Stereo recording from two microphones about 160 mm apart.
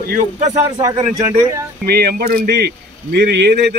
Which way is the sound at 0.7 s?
25° right (ahead or behind).